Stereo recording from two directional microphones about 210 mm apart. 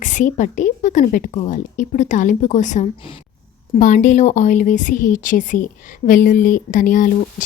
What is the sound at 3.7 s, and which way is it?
A woman's voice, 35° left (ahead or behind).